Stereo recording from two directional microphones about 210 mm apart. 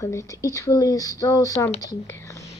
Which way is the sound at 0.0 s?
15° left (ahead or behind).